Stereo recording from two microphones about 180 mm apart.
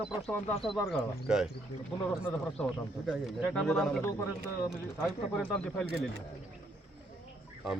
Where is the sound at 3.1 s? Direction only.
5° left (ahead or behind).